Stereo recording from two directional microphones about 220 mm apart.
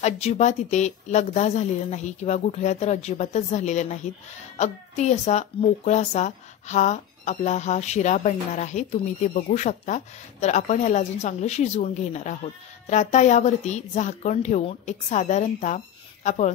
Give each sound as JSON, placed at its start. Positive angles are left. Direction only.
{"t": 0.0, "sound": "a woman's voice", "side_deg": 30}